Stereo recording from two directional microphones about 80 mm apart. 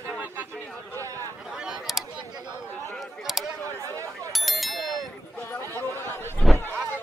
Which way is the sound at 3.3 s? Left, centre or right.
Centre.